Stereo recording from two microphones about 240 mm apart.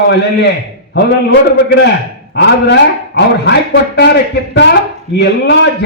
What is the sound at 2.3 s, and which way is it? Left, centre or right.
A man's voice, left.